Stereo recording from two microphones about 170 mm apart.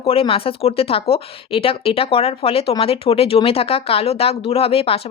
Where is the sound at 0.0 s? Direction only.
35° left (ahead or behind).